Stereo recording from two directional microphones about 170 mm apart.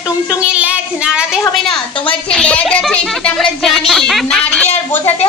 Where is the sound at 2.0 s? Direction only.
5° left (ahead or behind).